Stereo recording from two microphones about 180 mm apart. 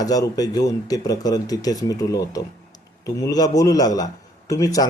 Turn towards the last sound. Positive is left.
turn(degrees=20)  # may be behind; listen again after turning